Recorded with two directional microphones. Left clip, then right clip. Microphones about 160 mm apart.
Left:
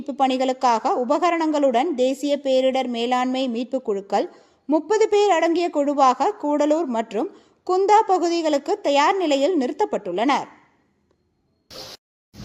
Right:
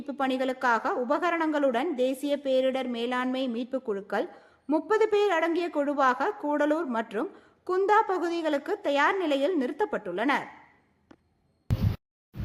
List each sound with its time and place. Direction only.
0.0 s a woman's voice: 15° left (ahead or behind)